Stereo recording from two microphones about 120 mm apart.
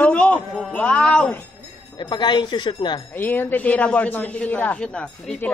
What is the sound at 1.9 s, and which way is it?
Speech, 40° left (ahead or behind).